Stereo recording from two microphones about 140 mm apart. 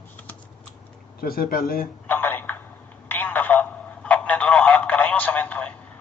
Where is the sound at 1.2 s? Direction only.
90° left.